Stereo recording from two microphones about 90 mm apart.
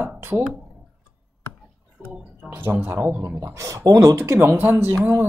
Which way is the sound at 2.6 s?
20° right (ahead or behind).